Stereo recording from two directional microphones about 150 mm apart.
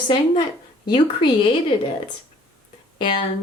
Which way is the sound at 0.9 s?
35° left (ahead or behind).